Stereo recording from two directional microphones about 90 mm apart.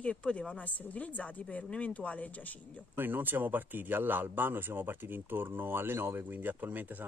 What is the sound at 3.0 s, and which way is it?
A man's voice, 20° right (ahead or behind).